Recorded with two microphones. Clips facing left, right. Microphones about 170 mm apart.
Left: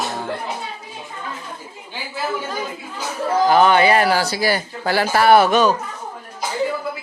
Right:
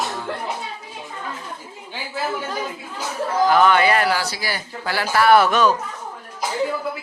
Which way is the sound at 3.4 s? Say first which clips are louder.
Left 2 dB; 30° left (ahead or behind).